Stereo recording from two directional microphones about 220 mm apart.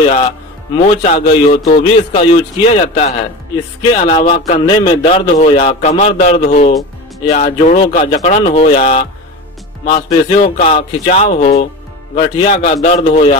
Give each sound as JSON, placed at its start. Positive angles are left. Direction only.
{"t": 0.8, "sound": "speech", "side_deg": 25}